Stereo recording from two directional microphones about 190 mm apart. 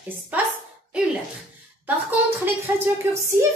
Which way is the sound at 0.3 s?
10° right (ahead or behind).